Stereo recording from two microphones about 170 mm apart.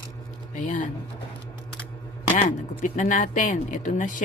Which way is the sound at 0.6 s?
50° left (ahead or behind).